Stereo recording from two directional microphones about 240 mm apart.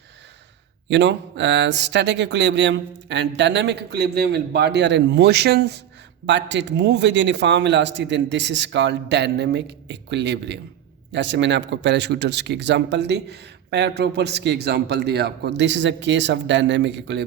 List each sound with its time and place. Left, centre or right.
0.9 s speech: right